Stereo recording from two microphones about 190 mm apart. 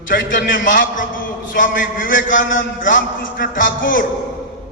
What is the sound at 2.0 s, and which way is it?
Speech, 80° left.